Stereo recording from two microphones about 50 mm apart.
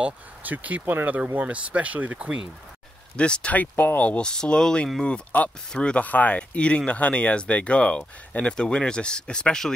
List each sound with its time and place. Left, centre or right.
0.4 s speech: right
3.2 s speech: centre
3.5 s speech: left
4.2 s speech: centre
5.3 s speech: left
5.7 s speech: left